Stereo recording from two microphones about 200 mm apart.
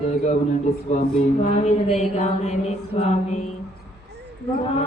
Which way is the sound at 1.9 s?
35° left (ahead or behind).